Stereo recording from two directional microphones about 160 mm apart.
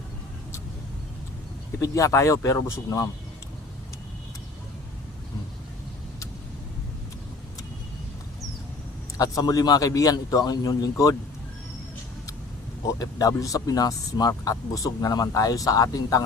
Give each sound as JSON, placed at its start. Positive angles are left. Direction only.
{"t": 1.8, "sound": "speech", "side_deg": 20}
{"t": 9.1, "sound": "speech", "side_deg": 20}
{"t": 13.0, "sound": "speech", "side_deg": 20}